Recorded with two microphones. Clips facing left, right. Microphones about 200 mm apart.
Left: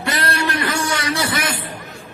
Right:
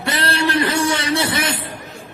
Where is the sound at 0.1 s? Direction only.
30° right (ahead or behind).